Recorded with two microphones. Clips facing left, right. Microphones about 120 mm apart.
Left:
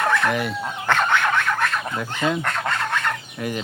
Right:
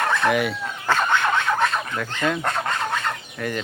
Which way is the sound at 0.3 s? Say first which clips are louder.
Right 2 dB; 5° right (ahead or behind).